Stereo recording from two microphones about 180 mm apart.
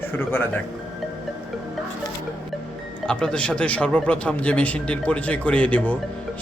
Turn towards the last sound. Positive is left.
turn(degrees=10)  # may be behind; listen again after turning